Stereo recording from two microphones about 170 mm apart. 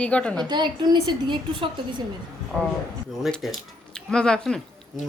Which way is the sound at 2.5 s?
5° left (ahead or behind).